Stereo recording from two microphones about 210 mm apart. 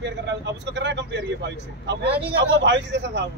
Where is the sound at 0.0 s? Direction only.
55° right (ahead or behind).